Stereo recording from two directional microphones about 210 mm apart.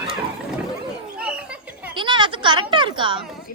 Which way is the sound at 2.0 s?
20° right (ahead or behind).